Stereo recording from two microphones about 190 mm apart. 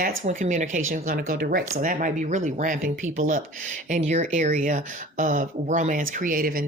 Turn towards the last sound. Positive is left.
turn(degrees=-50)  # may be behind; listen again after turning